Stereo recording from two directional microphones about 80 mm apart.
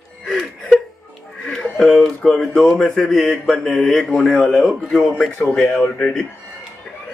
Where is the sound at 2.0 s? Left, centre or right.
Centre.